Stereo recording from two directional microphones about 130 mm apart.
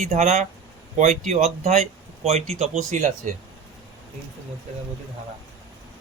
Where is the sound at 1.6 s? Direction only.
55° right (ahead or behind).